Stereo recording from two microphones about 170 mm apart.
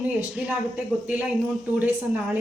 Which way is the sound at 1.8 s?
10° right (ahead or behind).